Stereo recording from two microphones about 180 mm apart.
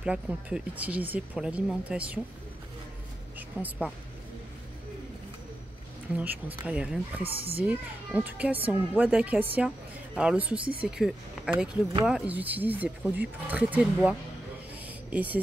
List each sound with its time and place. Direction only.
0.0 s speech: 5° right (ahead or behind)
3.3 s speech: 10° right (ahead or behind)
6.1 s speech: 10° right (ahead or behind)
7.2 s speech: 30° right (ahead or behind)
7.6 s speech: 10° right (ahead or behind)
14.9 s a sound: 10° right (ahead or behind)